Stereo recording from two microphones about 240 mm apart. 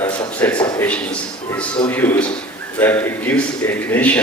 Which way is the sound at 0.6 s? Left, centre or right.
Centre.